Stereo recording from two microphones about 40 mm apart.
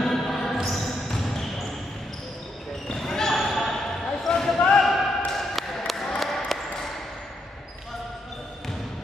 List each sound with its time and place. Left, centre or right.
0.0 s basketball bounce: centre
2.9 s basketball bounce: centre
4.6 s basketball bounce: centre
4.8 s a sound: centre